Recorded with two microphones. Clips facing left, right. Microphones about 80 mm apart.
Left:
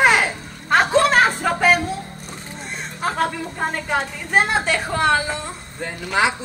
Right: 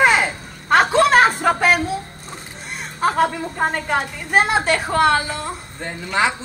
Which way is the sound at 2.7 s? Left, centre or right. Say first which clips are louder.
Right 5 dB; centre.